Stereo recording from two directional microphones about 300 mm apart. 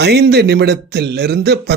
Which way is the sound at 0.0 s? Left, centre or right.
Right.